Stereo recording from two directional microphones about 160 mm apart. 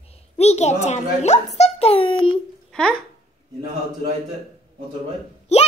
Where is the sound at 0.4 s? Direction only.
45° left (ahead or behind).